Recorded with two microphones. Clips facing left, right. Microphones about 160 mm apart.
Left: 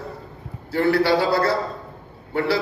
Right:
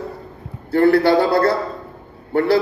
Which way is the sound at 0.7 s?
55° right (ahead or behind).